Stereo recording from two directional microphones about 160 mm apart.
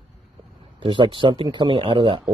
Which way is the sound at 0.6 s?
30° right (ahead or behind).